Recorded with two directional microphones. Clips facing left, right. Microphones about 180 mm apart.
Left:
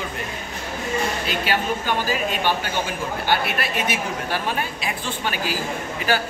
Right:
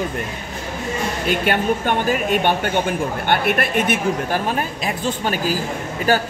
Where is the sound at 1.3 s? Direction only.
55° right (ahead or behind).